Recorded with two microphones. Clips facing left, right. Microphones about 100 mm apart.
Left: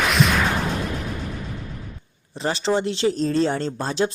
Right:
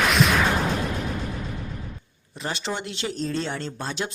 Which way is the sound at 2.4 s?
30° left (ahead or behind).